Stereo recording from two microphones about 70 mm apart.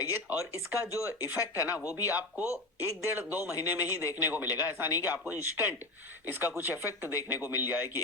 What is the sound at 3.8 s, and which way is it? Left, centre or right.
Speech, left.